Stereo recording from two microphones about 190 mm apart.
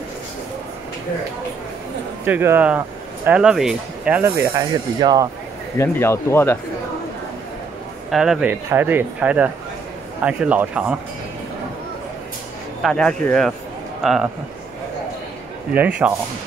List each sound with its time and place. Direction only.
2.2 s speech: 10° right (ahead or behind)
5.8 s speech: 15° left (ahead or behind)
8.1 s speech: 5° right (ahead or behind)
12.8 s speech: 5° left (ahead or behind)
15.7 s speech: 5° right (ahead or behind)